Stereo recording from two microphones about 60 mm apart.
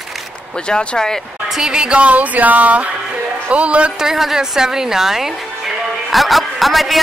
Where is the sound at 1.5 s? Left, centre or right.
Centre.